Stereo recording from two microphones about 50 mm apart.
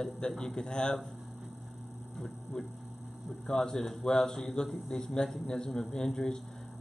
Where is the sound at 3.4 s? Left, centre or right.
Centre.